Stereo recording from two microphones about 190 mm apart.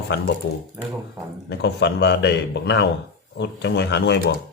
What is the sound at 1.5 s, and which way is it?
A man's voice, 60° left (ahead or behind).